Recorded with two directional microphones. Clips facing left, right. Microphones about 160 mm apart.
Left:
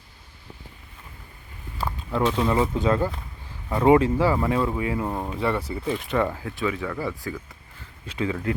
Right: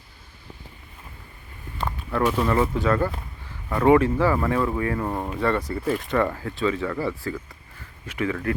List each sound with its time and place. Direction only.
1.8 s a sound: 10° left (ahead or behind)
2.2 s speech: 5° right (ahead or behind)
2.5 s speech: 15° left (ahead or behind)
5.0 s speech: centre (ahead or behind)
8.0 s speech: 30° left (ahead or behind)
8.3 s speech: 20° left (ahead or behind)